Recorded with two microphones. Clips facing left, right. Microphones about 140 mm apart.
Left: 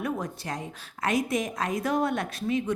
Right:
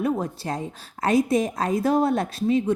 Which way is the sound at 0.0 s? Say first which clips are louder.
Right 6 dB; 30° right (ahead or behind).